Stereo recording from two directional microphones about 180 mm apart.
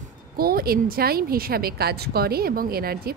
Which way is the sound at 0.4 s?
55° right (ahead or behind).